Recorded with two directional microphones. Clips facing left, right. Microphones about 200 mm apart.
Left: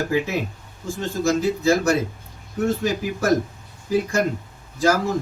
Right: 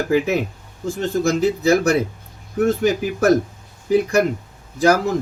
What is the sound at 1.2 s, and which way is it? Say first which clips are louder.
Speech: right 1 dB; 60° right (ahead or behind).